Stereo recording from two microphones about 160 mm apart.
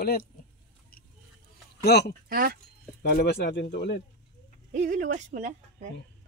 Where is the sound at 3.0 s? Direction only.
80° left.